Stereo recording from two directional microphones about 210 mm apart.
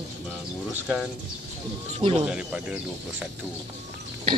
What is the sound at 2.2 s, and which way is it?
Speech, 5° right (ahead or behind).